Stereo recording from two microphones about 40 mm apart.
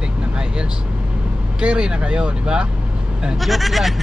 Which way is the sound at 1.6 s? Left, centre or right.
Right.